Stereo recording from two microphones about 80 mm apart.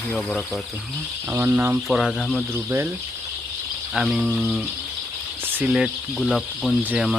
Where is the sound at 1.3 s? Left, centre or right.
Right.